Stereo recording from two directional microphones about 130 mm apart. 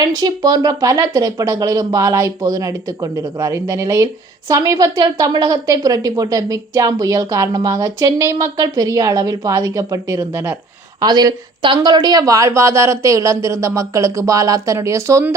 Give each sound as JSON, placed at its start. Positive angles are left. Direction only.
{"t": 0.0, "sound": "speech", "side_deg": -30}
{"t": 11.0, "sound": "speech", "side_deg": -30}